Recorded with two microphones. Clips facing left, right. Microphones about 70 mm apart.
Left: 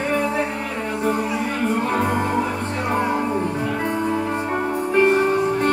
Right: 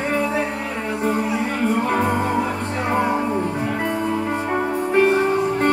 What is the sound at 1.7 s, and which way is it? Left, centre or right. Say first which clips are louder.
Music: right 1 dB; right.